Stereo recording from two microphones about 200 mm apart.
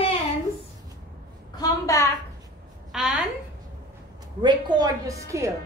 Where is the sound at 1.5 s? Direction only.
20° left (ahead or behind).